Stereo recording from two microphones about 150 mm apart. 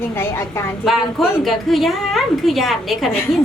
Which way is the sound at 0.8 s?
Centre (ahead or behind).